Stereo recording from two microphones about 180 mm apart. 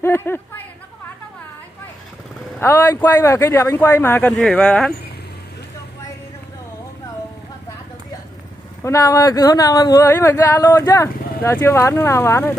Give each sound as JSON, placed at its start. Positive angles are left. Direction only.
{"t": 0.0, "sound": "a sound", "side_deg": 15}
{"t": 2.6, "sound": "speech", "side_deg": 15}
{"t": 8.8, "sound": "speech", "side_deg": 15}